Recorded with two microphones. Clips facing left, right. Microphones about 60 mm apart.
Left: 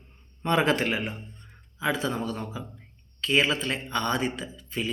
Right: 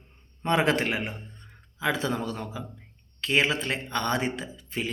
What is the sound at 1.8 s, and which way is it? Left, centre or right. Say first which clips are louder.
A man's voice: even; right.